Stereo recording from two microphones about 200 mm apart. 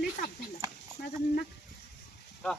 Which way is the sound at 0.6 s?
15° right (ahead or behind).